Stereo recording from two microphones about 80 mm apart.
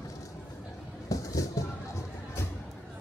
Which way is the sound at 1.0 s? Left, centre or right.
Left.